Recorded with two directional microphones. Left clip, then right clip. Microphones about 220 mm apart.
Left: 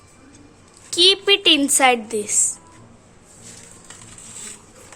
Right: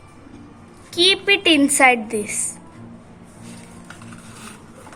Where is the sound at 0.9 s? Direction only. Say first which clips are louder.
Left 1 dB; 30° left (ahead or behind).